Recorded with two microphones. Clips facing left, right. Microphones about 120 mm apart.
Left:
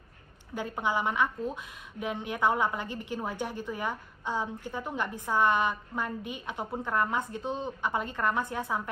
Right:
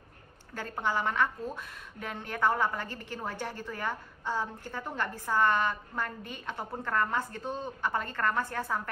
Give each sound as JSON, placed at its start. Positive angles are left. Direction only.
{"t": 0.6, "sound": "a woman's voice", "side_deg": 15}